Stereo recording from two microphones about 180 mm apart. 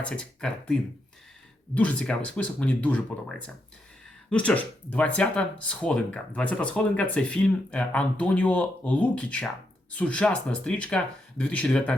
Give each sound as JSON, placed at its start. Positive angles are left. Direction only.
{"t": 0.0, "sound": "speech", "side_deg": 5}